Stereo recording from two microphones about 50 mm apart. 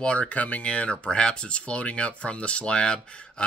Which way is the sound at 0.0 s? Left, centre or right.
Left.